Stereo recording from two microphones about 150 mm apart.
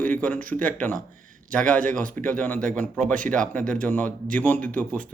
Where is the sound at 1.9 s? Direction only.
65° right (ahead or behind).